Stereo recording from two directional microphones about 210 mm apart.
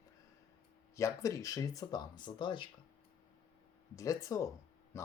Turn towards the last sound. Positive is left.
turn(degrees=15)  # may be behind; listen again after turning